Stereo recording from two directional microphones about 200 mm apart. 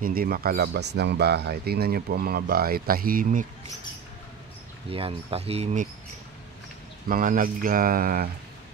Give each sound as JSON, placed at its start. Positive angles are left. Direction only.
{"t": 0.0, "sound": "speech", "side_deg": -50}
{"t": 4.8, "sound": "speech", "side_deg": -30}
{"t": 7.1, "sound": "speech", "side_deg": -45}